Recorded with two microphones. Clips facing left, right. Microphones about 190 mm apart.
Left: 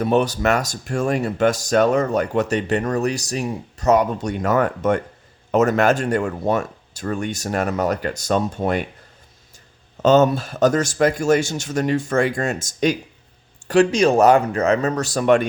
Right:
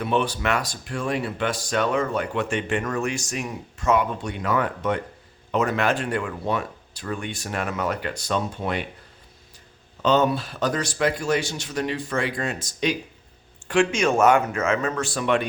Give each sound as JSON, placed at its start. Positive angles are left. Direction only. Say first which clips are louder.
{"t": 0.0, "sound": "speech", "louder": "left 6 dB", "side_deg": 40}
{"t": 10.0, "sound": "speech", "louder": "left 6 dB", "side_deg": 45}